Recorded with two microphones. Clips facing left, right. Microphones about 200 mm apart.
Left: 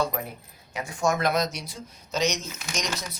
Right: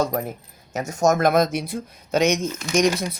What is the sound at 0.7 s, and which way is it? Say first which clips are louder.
Speech: right 6 dB; 45° right (ahead or behind).